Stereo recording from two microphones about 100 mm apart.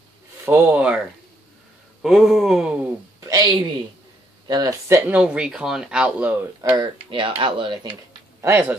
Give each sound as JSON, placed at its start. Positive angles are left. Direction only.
{"t": 0.5, "sound": "speech", "side_deg": -20}
{"t": 2.0, "sound": "a sound", "side_deg": -5}
{"t": 3.3, "sound": "a sound", "side_deg": -40}
{"t": 4.5, "sound": "speech", "side_deg": -45}
{"t": 5.0, "sound": "speech", "side_deg": -10}
{"t": 6.8, "sound": "speech", "side_deg": -60}
{"t": 8.4, "sound": "speech", "side_deg": -20}